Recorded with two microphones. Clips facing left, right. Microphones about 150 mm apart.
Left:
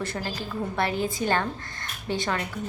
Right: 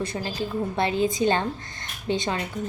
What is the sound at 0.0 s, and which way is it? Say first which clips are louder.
A woman's voice: right 3 dB; 15° right (ahead or behind).